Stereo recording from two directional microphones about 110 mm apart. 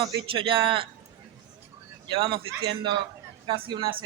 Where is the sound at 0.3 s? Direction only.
55° right (ahead or behind).